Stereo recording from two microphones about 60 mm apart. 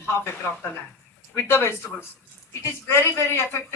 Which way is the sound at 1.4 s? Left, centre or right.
Left.